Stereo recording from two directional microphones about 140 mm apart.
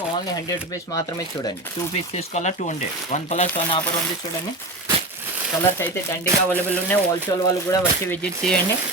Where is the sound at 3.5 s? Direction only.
35° left (ahead or behind).